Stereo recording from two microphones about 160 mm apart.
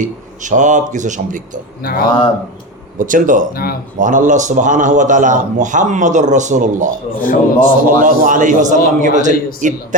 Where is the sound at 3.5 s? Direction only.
70° left (ahead or behind).